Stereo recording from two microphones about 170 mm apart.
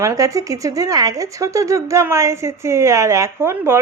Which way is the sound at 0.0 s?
20° right (ahead or behind).